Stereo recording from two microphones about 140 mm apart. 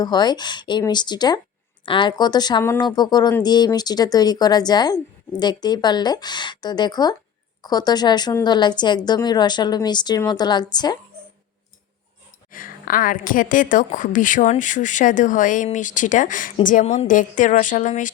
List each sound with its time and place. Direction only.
0.0 s a woman's voice: 30° left (ahead or behind)
12.5 s a woman's voice: 85° left; by 18.1 s 60° left (ahead or behind)